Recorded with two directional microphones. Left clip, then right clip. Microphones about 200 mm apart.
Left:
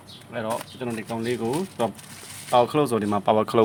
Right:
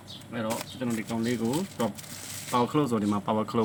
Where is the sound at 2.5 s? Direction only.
55° left (ahead or behind).